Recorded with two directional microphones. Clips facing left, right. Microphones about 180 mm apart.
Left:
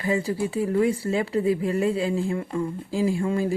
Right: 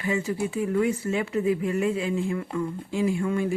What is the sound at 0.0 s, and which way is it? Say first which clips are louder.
Speech: left 2 dB; 35° left (ahead or behind).